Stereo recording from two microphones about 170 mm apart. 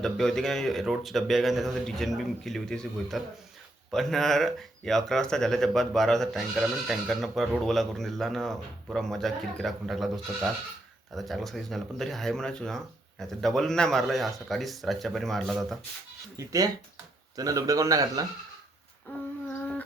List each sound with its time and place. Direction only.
0.0 s speech: 5° left (ahead or behind)
16.4 s speech: 20° right (ahead or behind)
19.1 s a sound: 10° left (ahead or behind)